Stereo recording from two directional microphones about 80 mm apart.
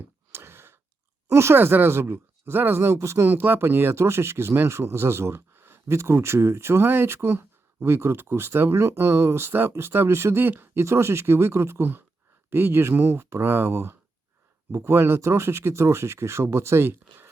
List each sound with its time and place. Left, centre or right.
0.3 s a sound: right
1.3 s speech: right
3.2 s speech: right